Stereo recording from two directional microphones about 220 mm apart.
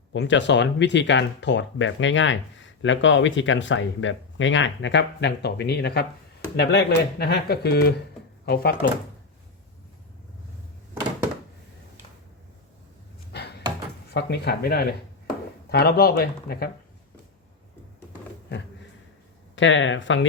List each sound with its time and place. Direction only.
0.1 s speech: 55° left (ahead or behind)
13.3 s a sound: 50° left (ahead or behind)
14.1 s speech: 50° left (ahead or behind)
19.5 s speech: 60° left (ahead or behind)